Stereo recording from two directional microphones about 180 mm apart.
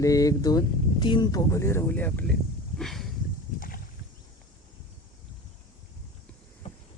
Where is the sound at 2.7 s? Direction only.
Centre (ahead or behind).